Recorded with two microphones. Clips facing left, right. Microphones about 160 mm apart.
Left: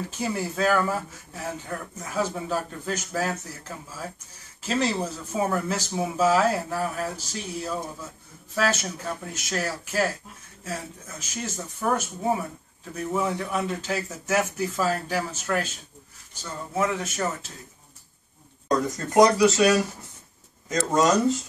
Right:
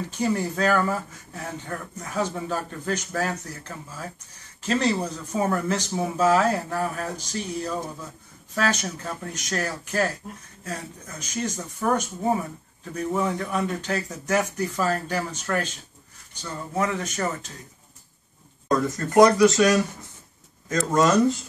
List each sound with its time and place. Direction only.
0.2 s speech: 5° left (ahead or behind)
18.7 s speech: 15° left (ahead or behind)
20.7 s speech: 20° left (ahead or behind)